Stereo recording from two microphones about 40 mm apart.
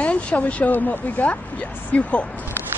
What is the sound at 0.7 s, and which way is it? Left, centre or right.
Speech, left.